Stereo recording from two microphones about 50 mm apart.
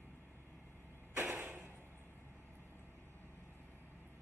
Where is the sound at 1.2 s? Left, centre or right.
Right.